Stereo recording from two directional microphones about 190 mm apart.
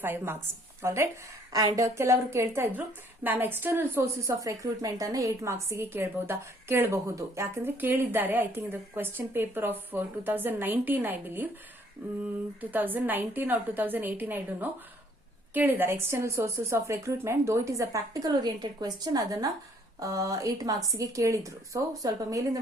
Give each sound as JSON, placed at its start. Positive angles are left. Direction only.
{"t": 0.0, "sound": "a woman's voice", "side_deg": -10}